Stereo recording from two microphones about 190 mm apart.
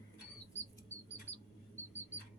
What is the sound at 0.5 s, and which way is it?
Chirp, 10° left (ahead or behind).